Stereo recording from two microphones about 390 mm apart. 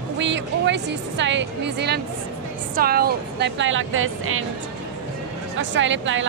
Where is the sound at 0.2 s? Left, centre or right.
Right.